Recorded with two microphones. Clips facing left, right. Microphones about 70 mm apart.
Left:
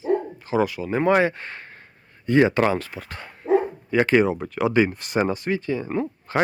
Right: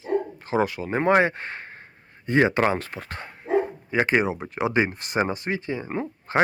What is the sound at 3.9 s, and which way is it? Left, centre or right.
Speech, right.